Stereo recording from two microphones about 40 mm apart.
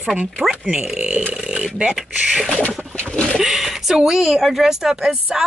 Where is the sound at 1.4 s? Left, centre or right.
Right.